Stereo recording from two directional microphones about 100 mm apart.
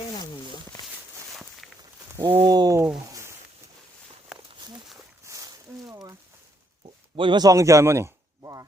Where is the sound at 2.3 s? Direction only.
45° right (ahead or behind).